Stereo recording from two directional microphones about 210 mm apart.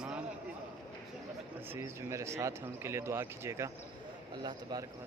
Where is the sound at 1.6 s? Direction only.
10° right (ahead or behind).